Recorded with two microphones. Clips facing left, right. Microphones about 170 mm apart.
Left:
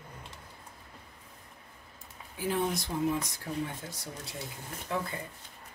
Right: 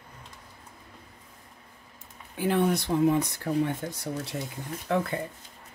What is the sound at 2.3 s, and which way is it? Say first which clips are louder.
Speech: right 6 dB; 65° right (ahead or behind).